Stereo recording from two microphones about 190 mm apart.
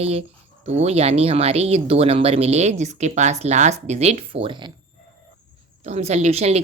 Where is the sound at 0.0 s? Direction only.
30° right (ahead or behind).